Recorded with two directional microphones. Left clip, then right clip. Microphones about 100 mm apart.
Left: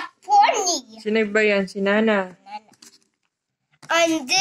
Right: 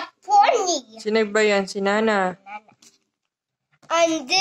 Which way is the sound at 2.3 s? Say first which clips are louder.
Right 6 dB; 20° right (ahead or behind).